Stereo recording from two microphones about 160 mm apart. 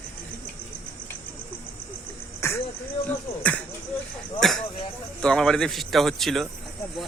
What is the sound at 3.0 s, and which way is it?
A man's voice, 10° left (ahead or behind).